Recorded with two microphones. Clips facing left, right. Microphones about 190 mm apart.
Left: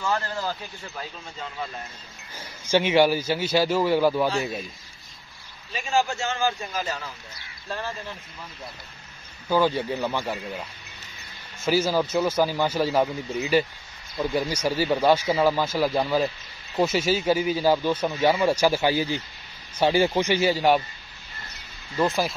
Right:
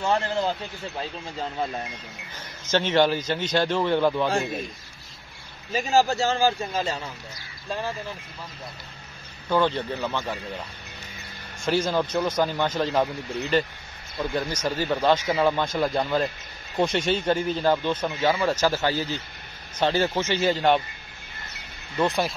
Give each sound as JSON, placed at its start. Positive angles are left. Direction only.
{"t": 0.0, "sound": "speech", "side_deg": -25}
{"t": 2.3, "sound": "speech", "side_deg": 10}
{"t": 5.7, "sound": "speech", "side_deg": -40}
{"t": 9.5, "sound": "speech", "side_deg": 10}
{"t": 11.6, "sound": "speech", "side_deg": 5}
{"t": 21.9, "sound": "speech", "side_deg": 0}